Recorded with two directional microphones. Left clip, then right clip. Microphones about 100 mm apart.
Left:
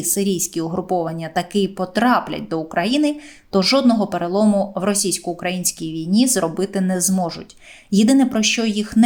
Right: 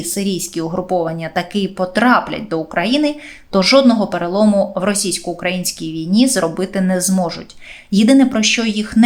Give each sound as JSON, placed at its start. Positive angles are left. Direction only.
{"t": 0.0, "sound": "speech", "side_deg": 35}